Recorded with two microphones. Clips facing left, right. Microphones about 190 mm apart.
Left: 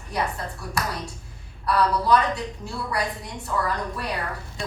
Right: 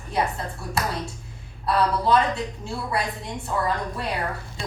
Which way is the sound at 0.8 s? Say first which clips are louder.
Right 2 dB; 25° right (ahead or behind).